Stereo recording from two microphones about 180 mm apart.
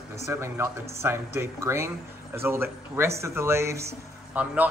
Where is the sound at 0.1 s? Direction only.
15° right (ahead or behind).